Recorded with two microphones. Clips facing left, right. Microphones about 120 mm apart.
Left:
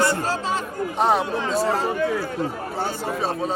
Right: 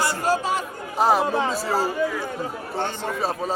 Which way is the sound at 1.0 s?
Centre (ahead or behind).